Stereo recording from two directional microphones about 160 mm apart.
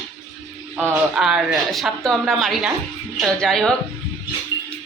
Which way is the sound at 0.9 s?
5° right (ahead or behind).